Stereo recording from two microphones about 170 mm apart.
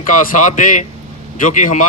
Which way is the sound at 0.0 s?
55° left (ahead or behind).